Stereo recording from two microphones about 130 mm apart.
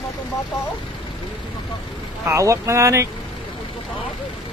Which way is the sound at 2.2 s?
25° right (ahead or behind).